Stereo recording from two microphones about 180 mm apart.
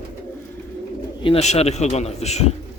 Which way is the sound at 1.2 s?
35° left (ahead or behind).